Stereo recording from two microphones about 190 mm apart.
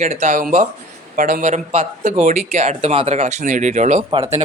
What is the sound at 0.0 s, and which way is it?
Speech, 40° right (ahead or behind).